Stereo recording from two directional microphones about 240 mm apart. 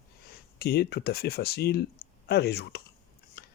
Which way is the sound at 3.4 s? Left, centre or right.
Left.